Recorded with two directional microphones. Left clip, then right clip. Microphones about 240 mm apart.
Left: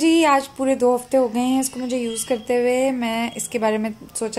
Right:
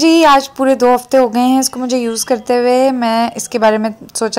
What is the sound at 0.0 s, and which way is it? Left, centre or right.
A woman's voice, right.